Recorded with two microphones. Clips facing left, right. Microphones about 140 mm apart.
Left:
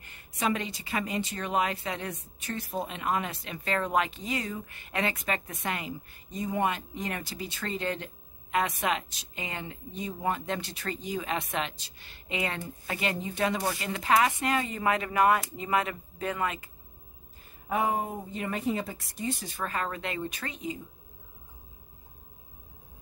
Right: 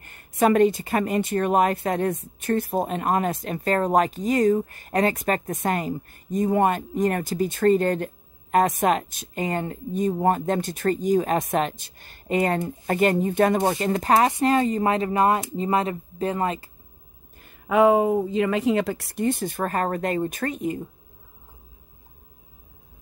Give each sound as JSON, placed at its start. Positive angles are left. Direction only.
{"t": 0.0, "sound": "speech", "side_deg": -50}
{"t": 17.4, "sound": "speech", "side_deg": -80}